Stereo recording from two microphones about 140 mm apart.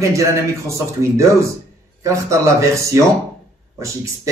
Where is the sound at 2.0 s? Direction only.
20° right (ahead or behind).